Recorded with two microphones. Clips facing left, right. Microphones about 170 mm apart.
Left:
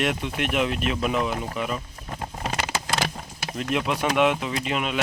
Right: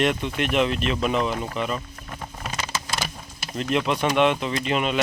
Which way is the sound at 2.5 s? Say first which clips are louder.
Left 2 dB; 65° left (ahead or behind).